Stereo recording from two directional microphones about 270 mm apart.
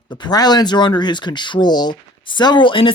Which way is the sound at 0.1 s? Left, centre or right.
Centre.